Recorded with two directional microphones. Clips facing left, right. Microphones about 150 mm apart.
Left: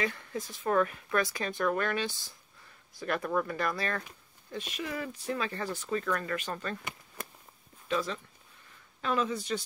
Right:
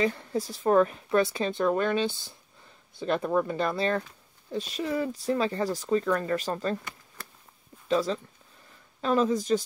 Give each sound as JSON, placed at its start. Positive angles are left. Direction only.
{"t": 0.0, "sound": "speech", "side_deg": -30}
{"t": 6.8, "sound": "a sound", "side_deg": 20}
{"t": 7.9, "sound": "speech", "side_deg": -35}